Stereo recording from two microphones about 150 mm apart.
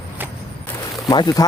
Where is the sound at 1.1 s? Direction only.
30° left (ahead or behind).